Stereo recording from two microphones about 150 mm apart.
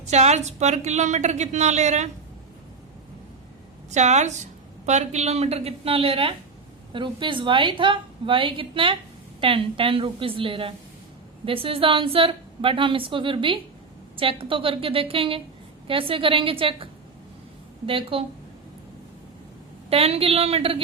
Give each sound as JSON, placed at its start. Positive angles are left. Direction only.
{"t": 0.0, "sound": "a woman's voice", "side_deg": -50}
{"t": 3.9, "sound": "a woman's voice", "side_deg": -50}
{"t": 19.9, "sound": "a woman's voice", "side_deg": -40}